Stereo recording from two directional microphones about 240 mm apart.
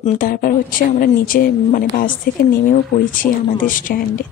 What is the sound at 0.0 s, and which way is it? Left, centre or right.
Speech, left.